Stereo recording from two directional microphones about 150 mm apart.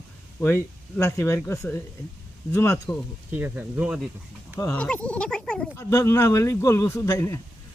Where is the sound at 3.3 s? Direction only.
10° right (ahead or behind).